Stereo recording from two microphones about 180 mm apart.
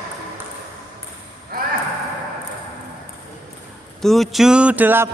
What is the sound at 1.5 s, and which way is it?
Ping, 55° right (ahead or behind).